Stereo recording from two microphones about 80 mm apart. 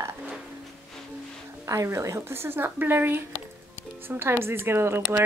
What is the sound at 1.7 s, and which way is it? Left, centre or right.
A woman's voice, right.